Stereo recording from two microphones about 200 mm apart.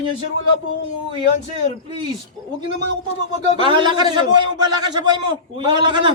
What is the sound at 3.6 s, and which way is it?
Speech, 25° right (ahead or behind).